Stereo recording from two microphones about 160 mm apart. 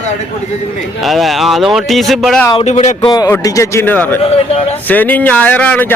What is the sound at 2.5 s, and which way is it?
Speech, 40° left (ahead or behind).